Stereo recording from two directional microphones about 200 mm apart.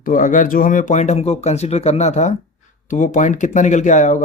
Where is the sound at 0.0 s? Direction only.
40° left (ahead or behind).